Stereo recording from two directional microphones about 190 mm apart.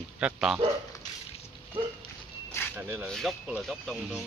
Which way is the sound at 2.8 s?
15° right (ahead or behind).